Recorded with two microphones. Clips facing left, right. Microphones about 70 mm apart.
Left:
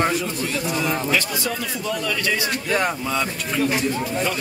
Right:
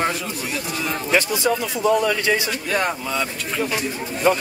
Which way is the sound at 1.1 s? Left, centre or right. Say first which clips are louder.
Right 4 dB; right.